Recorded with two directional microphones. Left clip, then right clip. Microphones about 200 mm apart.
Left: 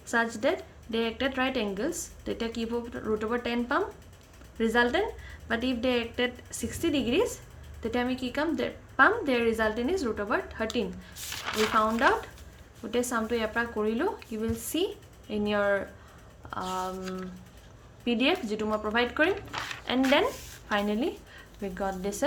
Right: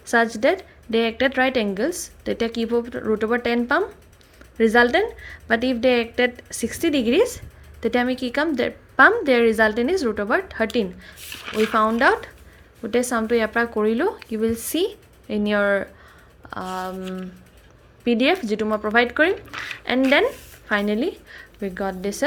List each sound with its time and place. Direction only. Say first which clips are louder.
0.1 s speech: right 8 dB; 35° right (ahead or behind)
18.0 s a woman's voice: right 7 dB; 35° right (ahead or behind)